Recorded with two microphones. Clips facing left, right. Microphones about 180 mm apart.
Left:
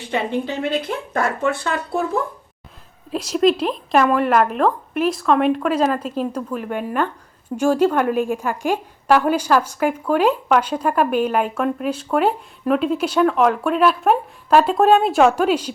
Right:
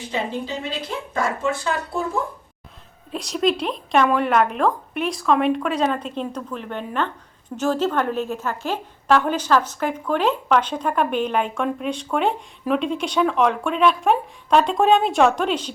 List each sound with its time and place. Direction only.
0.1 s speech: 65° left (ahead or behind)
3.1 s a woman's voice: centre (ahead or behind)